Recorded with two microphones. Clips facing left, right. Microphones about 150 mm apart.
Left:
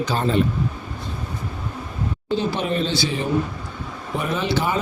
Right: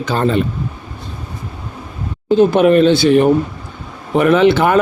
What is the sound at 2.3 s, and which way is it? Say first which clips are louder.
Speech: right 13 dB; 55° right (ahead or behind).